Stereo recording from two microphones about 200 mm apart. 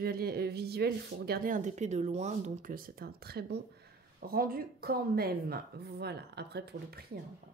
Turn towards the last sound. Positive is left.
turn(degrees=-55)  # may be behind; listen again after turning